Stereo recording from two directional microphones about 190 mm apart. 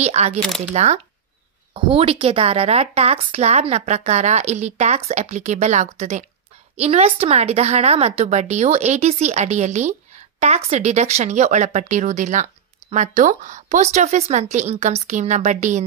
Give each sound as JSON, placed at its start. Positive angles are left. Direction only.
{"t": 0.0, "sound": "a woman's voice", "side_deg": -35}
{"t": 0.4, "sound": "speech", "side_deg": 0}
{"t": 0.7, "sound": "a woman's voice", "side_deg": -35}